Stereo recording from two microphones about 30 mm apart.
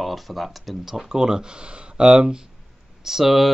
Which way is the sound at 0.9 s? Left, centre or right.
Centre.